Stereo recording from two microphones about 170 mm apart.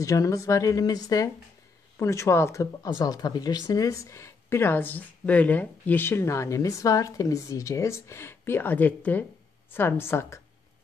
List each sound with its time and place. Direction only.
0.0 s a woman's voice: 20° left (ahead or behind)